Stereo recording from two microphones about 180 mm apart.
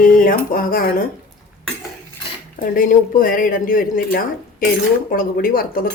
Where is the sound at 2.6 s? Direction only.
50° left (ahead or behind).